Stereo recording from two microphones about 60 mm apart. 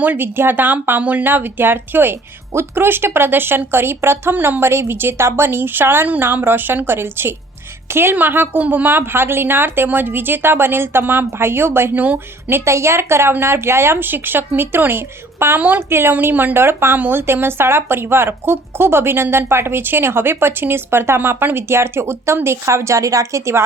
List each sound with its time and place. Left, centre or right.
0.0 s speech: right
4.6 s a woman's voice: right